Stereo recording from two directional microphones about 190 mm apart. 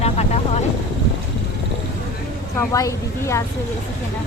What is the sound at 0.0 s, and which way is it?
Vehicle, 35° left (ahead or behind).